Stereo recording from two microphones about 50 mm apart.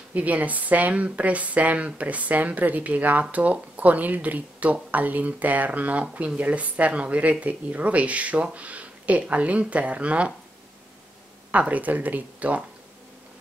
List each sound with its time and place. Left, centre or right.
0.1 s speech: right
11.5 s speech: right